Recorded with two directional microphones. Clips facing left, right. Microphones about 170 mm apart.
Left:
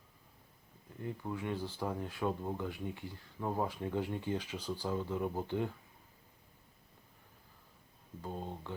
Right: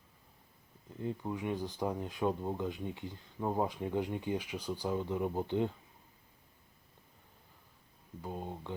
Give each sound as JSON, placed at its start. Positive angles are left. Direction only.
{"t": 1.0, "sound": "speech", "side_deg": -20}
{"t": 8.2, "sound": "speech", "side_deg": -15}